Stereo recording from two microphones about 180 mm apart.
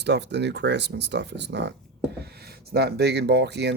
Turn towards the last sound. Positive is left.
turn(degrees=-70)  # may be behind; listen again after turning